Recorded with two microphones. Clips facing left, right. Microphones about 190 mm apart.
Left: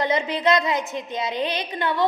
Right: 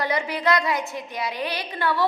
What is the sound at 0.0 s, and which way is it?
A woman's voice, 20° left (ahead or behind).